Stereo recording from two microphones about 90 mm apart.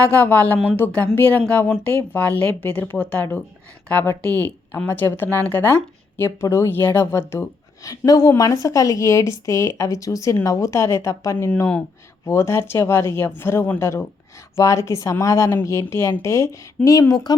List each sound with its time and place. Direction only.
0.2 s speech: 20° left (ahead or behind)
7.9 s a woman's voice: 45° left (ahead or behind)